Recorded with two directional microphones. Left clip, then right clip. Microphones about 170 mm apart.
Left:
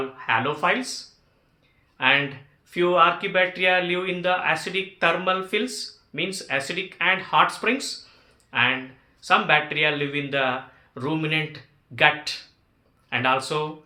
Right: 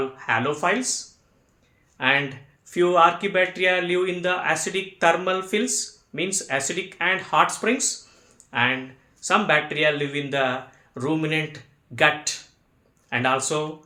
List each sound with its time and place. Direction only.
0.2 s speech: 30° right (ahead or behind)
2.0 s speech: 25° right (ahead or behind)